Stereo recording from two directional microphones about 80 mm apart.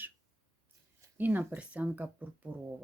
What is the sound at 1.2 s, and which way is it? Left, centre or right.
Speech, right.